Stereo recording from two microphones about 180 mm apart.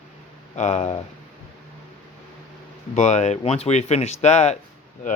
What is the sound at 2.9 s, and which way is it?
Speech, 40° left (ahead or behind).